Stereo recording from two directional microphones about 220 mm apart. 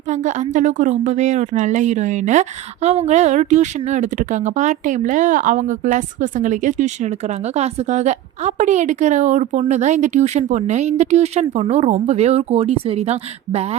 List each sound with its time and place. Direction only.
0.1 s a woman's voice: 35° right (ahead or behind)